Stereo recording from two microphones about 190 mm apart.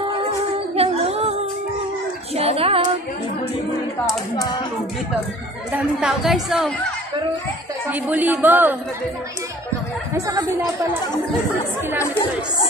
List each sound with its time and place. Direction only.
0.2 s music: 30° right (ahead or behind)
2.3 s child singing: 30° right (ahead or behind)
5.7 s speech: 5° right (ahead or behind)
7.9 s speech: 10° right (ahead or behind)
10.1 s speech: 15° right (ahead or behind)